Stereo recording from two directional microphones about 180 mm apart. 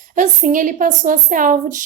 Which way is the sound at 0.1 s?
45° right (ahead or behind).